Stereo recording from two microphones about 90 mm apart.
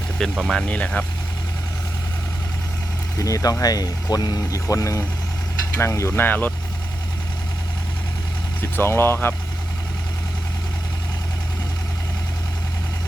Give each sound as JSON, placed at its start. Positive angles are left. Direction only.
{"t": 0.2, "sound": "speech", "side_deg": 5}
{"t": 0.7, "sound": "speech", "side_deg": 15}
{"t": 3.2, "sound": "speech", "side_deg": 40}
{"t": 4.6, "sound": "speech", "side_deg": 35}
{"t": 8.6, "sound": "speech", "side_deg": 25}